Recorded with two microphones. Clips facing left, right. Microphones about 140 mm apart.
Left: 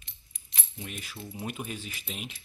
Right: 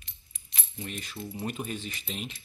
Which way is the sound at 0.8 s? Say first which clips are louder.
Right 3 dB; 5° left (ahead or behind).